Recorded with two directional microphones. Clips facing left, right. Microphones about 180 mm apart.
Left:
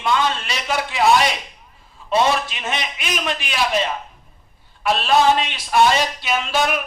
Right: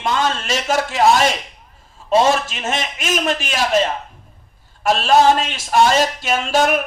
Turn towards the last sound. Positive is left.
turn(degrees=-45)  # may be behind; listen again after turning